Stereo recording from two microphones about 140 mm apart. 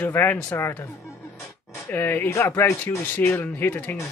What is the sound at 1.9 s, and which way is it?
Speech, 15° left (ahead or behind).